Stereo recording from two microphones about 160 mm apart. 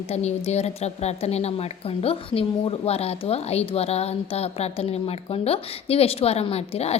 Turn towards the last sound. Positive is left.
turn(degrees=40)  # may be behind; listen again after turning